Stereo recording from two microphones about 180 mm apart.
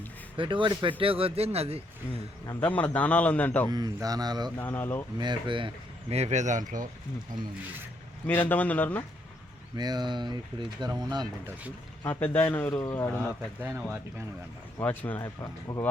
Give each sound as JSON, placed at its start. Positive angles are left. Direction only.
{"t": 0.3, "sound": "speech", "side_deg": -30}
{"t": 2.6, "sound": "a man's voice", "side_deg": 10}
{"t": 3.7, "sound": "speech", "side_deg": -20}
{"t": 4.5, "sound": "a man's voice", "side_deg": 10}
{"t": 5.1, "sound": "speech", "side_deg": -25}
{"t": 8.3, "sound": "a man's voice", "side_deg": 10}
{"t": 9.7, "sound": "speech", "side_deg": -25}
{"t": 12.0, "sound": "a man's voice", "side_deg": 10}
{"t": 13.6, "sound": "speech", "side_deg": -10}
{"t": 14.8, "sound": "a man's voice", "side_deg": 10}